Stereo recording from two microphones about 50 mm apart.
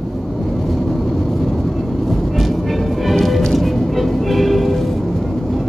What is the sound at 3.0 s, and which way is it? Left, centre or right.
Music, centre.